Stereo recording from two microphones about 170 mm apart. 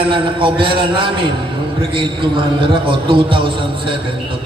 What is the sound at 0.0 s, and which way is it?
A man's voice, 30° right (ahead or behind).